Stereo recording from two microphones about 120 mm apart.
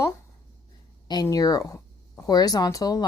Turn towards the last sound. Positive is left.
turn(degrees=30)  # may be behind; listen again after turning